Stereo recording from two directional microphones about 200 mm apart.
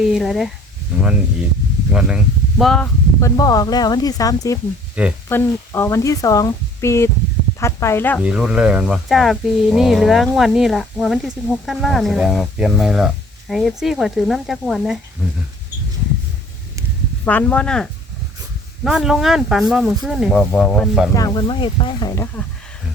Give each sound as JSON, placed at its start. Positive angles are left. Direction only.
{"t": 0.0, "sound": "speech", "side_deg": 0}
{"t": 0.9, "sound": "sizzle", "side_deg": -5}
{"t": 1.9, "sound": "speech", "side_deg": -5}
{"t": 3.2, "sound": "speech", "side_deg": 15}
{"t": 5.0, "sound": "speech", "side_deg": -5}
{"t": 5.3, "sound": "speech", "side_deg": 10}
{"t": 8.2, "sound": "speech", "side_deg": -5}
{"t": 17.2, "sound": "speech", "side_deg": 10}
{"t": 18.9, "sound": "speech", "side_deg": 0}
{"t": 21.1, "sound": "speech", "side_deg": 15}
{"t": 22.1, "sound": "speech", "side_deg": 10}